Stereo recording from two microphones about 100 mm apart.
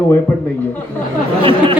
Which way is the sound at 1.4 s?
60° right (ahead or behind).